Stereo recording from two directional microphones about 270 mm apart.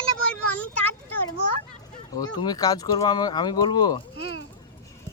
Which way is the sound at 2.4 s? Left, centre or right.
Centre.